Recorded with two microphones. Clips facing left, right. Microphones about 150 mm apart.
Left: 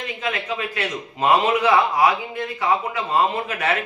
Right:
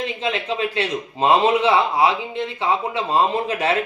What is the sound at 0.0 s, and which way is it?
A man's voice, 30° right (ahead or behind).